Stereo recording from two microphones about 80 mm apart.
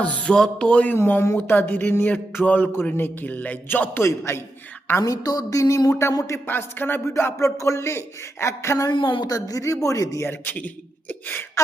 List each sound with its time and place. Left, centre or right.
0.0 s music: centre
0.9 s speech: left
1.4 s a sound: left
5.0 s speech: left
6.4 s a sound: left
7.1 s speech: left
8.9 s a woman's voice: left
9.3 s speech: left
10.2 s a sound: left